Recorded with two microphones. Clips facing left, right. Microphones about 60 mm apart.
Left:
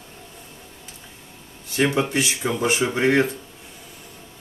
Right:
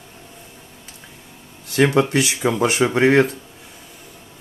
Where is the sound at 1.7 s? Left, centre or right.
Right.